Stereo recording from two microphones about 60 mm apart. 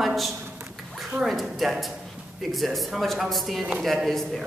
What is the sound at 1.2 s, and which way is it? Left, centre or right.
A man's voice, centre.